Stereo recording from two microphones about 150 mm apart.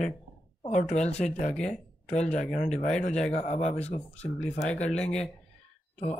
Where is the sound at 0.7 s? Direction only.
50° left (ahead or behind).